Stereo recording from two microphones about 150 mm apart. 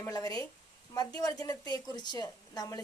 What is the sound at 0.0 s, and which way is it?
A woman's voice, 25° left (ahead or behind).